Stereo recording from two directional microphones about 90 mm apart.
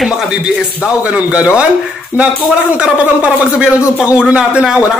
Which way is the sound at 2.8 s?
10° right (ahead or behind).